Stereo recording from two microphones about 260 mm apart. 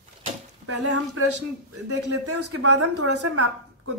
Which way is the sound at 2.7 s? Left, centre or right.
Right.